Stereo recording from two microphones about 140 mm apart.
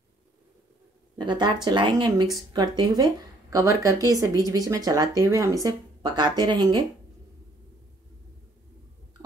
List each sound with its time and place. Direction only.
1.1 s speech: 30° right (ahead or behind)